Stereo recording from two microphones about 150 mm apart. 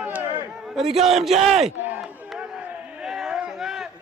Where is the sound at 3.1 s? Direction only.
5° right (ahead or behind).